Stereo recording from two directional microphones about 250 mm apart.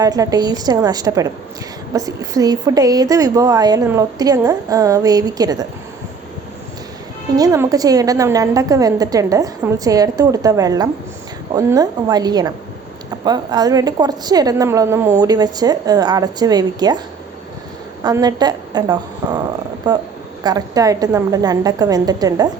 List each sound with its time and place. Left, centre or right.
0.0 s a woman's voice: centre
7.3 s a woman's voice: centre
18.0 s a woman's voice: centre